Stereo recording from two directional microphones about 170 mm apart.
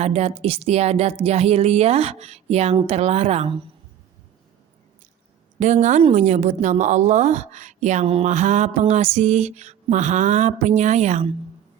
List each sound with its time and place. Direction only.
0.0 s a woman's voice: 40° right (ahead or behind)
5.5 s a woman's voice: 45° right (ahead or behind)